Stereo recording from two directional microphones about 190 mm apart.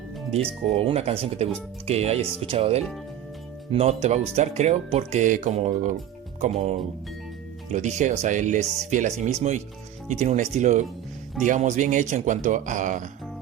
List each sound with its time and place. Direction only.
0.3 s speech: 30° right (ahead or behind)